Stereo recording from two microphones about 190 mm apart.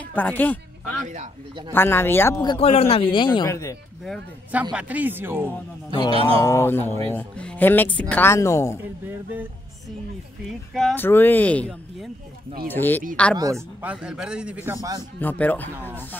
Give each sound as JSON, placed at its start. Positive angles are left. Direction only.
{"t": 0.0, "sound": "music", "side_deg": 10}
{"t": 1.7, "sound": "speech", "side_deg": 10}
{"t": 2.4, "sound": "speech", "side_deg": 30}
{"t": 4.7, "sound": "speech", "side_deg": -10}
{"t": 6.1, "sound": "speech", "side_deg": -30}
{"t": 6.4, "sound": "speech", "side_deg": 15}
{"t": 10.7, "sound": "speech", "side_deg": 0}
{"t": 13.4, "sound": "speech", "side_deg": -15}
{"t": 15.1, "sound": "speech", "side_deg": 10}